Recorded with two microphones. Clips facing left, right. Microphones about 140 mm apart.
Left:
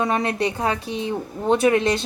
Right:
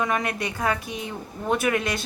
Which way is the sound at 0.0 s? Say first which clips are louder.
Left 4 dB; 30° left (ahead or behind).